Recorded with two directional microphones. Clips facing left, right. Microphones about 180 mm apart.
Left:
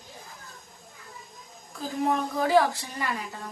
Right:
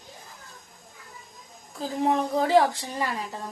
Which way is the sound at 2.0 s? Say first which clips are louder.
Right 2 dB; 25° right (ahead or behind).